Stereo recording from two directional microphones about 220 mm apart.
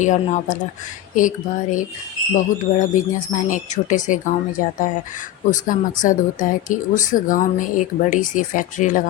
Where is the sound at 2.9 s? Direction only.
35° left (ahead or behind).